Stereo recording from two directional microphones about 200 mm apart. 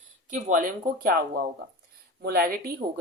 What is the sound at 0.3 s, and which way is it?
Speech, 40° right (ahead or behind).